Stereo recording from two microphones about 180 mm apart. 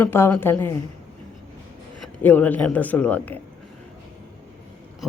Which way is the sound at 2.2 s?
10° left (ahead or behind).